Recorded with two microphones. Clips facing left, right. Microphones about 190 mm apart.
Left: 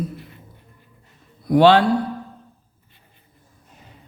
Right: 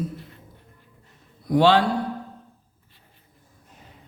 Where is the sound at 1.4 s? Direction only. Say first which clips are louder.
Left 4 dB; 65° left (ahead or behind).